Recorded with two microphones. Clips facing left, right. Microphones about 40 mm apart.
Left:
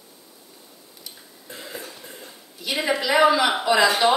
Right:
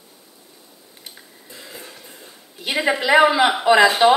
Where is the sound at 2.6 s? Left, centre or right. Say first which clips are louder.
Right 4 dB; right.